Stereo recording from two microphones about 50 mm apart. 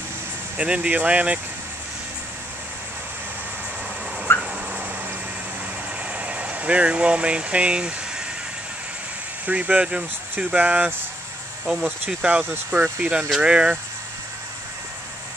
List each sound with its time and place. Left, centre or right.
0.6 s speech: right
4.3 s a sound: left
6.1 s speech: right
9.5 s speech: right
11.6 s speech: centre
12.7 s speech: right
13.4 s speech: right